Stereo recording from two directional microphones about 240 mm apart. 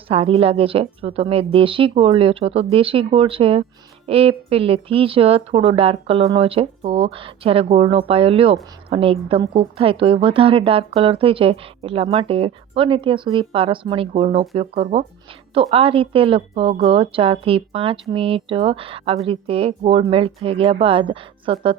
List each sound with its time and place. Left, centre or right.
0.1 s a woman's voice: right